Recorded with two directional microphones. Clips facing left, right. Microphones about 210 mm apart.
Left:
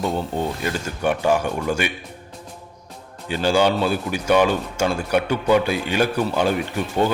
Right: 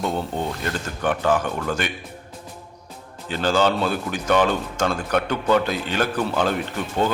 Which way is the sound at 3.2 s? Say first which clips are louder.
Left 2 dB; 10° left (ahead or behind).